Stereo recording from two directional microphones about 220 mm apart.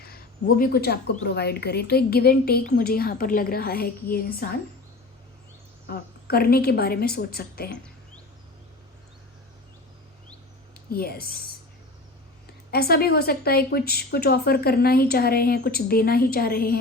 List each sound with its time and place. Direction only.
0.0 s speech: 40° left (ahead or behind)
5.9 s speech: 45° left (ahead or behind)
10.8 s speech: 45° left (ahead or behind)
12.7 s speech: 45° left (ahead or behind)